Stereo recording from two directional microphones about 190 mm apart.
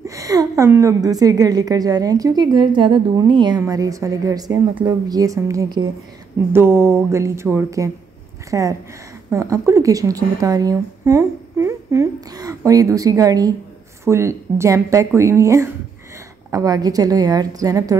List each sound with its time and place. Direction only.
0.0 s a woman's voice: 15° right (ahead or behind)